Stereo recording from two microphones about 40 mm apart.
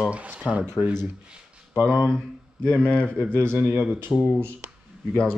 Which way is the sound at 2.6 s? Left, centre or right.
Left.